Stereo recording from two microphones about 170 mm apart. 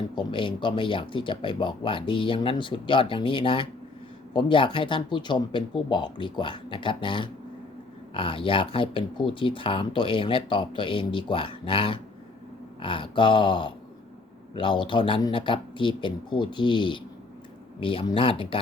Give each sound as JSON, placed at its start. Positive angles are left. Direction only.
{"t": 0.2, "sound": "speech", "side_deg": 30}